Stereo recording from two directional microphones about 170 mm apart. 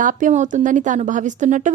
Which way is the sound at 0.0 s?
50° right (ahead or behind).